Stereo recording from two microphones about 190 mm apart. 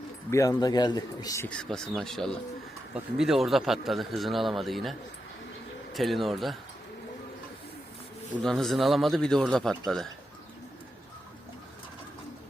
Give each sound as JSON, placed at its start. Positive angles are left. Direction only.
{"t": 0.3, "sound": "a man's voice", "side_deg": 15}
{"t": 1.5, "sound": "a man's voice", "side_deg": 5}
{"t": 8.4, "sound": "a man's voice", "side_deg": 0}